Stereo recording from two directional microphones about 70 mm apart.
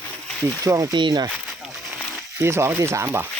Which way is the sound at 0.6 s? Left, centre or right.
Right.